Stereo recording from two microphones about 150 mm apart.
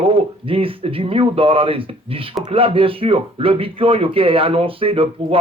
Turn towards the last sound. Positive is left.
turn(degrees=-35)  # may be behind; listen again after turning